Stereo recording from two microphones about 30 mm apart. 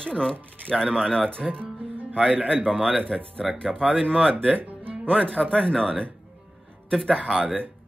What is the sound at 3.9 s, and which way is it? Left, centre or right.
Speech, left.